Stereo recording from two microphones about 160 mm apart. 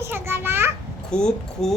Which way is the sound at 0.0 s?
15° right (ahead or behind).